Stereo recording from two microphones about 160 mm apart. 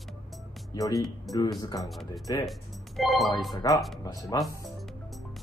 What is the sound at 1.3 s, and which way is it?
Speech, centre (ahead or behind).